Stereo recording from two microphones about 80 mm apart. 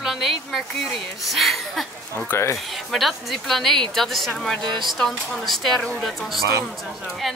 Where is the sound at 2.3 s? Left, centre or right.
Left.